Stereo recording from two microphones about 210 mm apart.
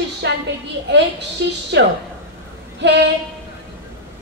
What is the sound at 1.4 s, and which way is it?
Speech, 55° right (ahead or behind).